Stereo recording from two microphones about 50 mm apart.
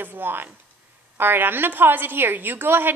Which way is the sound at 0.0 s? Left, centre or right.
Right.